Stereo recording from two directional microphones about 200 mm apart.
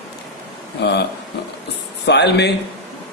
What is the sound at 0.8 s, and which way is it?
A man's voice, 55° left (ahead or behind).